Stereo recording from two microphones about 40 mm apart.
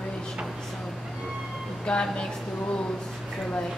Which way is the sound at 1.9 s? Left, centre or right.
Left.